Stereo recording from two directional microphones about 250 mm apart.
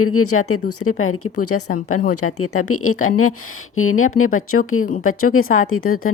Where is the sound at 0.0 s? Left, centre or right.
Left.